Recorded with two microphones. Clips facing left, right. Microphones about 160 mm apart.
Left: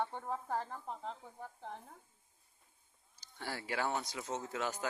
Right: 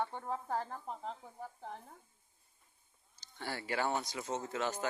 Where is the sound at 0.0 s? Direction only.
Centre (ahead or behind).